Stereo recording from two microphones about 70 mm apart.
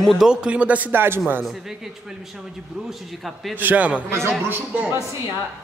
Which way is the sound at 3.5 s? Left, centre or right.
Right.